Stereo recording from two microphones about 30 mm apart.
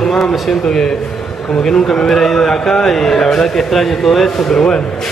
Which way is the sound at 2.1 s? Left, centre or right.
Centre.